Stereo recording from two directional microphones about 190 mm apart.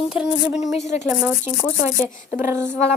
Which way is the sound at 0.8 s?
35° left (ahead or behind).